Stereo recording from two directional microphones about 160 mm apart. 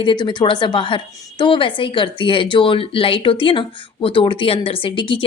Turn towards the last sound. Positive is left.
turn(degrees=30)  # may be behind; listen again after turning